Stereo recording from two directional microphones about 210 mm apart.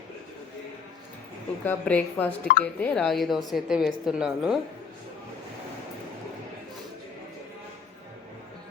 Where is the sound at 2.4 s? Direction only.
40° left (ahead or behind).